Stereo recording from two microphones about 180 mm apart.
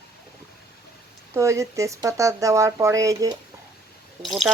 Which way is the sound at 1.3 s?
15° right (ahead or behind).